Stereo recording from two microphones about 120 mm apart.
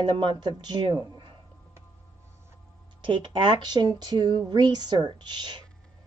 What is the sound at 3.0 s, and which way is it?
Speech, 40° right (ahead or behind).